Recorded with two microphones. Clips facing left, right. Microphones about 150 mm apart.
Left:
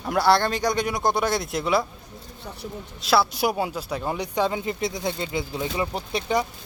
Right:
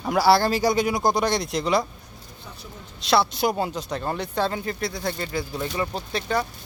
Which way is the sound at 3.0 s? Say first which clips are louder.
Even; 5° left (ahead or behind).